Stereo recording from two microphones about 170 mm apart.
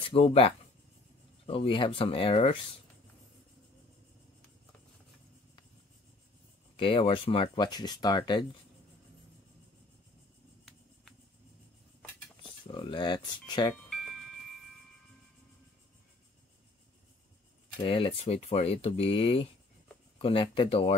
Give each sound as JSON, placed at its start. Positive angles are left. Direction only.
{"t": 0.1, "sound": "speech", "side_deg": 35}
{"t": 6.8, "sound": "speech", "side_deg": 30}
{"t": 12.6, "sound": "speech", "side_deg": 30}
{"t": 13.8, "sound": "music", "side_deg": 0}
{"t": 17.7, "sound": "speech", "side_deg": 30}